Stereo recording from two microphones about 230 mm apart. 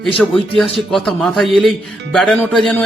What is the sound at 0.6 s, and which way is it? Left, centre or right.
Speech, centre.